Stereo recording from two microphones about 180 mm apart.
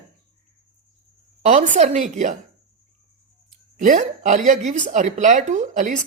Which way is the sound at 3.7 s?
45° right (ahead or behind).